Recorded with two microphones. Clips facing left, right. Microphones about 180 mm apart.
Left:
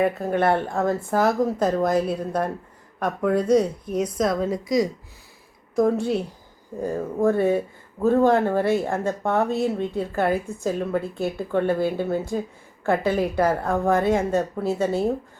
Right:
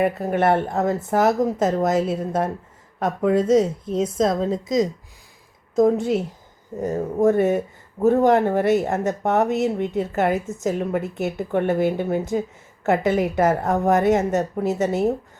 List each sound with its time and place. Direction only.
0.0 s speech: 20° right (ahead or behind)